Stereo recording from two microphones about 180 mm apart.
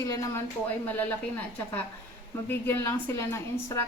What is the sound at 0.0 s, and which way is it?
Speech, 15° left (ahead or behind).